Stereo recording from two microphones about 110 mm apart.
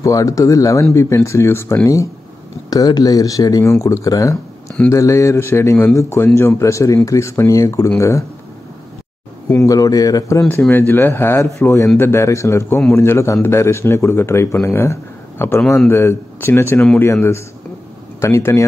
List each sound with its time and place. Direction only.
0.0 s a man's voice: 30° left (ahead or behind)
9.5 s speech: 30° left (ahead or behind)
10.7 s a man's voice: 20° left (ahead or behind)